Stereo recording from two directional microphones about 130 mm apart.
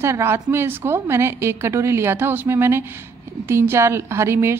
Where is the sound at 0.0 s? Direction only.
20° right (ahead or behind).